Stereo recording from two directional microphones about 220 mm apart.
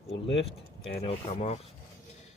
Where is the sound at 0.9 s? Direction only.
25° left (ahead or behind).